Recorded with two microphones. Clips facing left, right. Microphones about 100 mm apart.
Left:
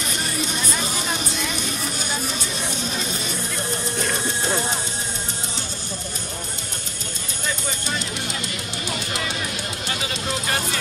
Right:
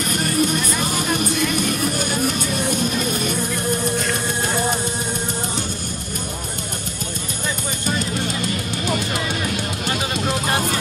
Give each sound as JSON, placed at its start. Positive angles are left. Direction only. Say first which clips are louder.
{"t": 0.1, "sound": "music", "louder": "right 9 dB", "side_deg": -50}